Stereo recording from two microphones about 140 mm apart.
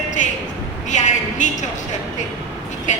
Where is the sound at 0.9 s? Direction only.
60° left (ahead or behind).